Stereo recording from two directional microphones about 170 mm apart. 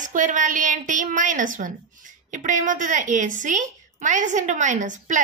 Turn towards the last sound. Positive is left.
turn(degrees=-45)  # may be behind; listen again after turning